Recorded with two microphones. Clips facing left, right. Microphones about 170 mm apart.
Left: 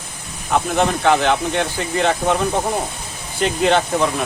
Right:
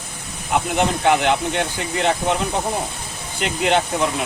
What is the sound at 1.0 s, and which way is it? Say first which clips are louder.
Speech: even; 15° right (ahead or behind).